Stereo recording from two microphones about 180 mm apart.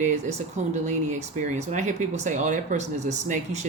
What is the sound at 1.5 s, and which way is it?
Speech, 40° right (ahead or behind).